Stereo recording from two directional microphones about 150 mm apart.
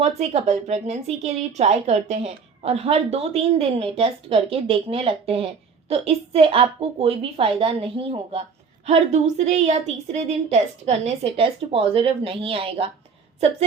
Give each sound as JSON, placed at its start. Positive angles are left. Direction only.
{"t": 0.0, "sound": "a woman's voice", "side_deg": -45}